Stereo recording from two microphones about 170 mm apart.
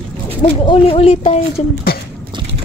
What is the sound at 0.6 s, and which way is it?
Speech, 30° left (ahead or behind).